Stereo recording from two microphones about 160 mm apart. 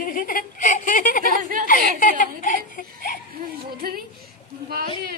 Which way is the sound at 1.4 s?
55° right (ahead or behind).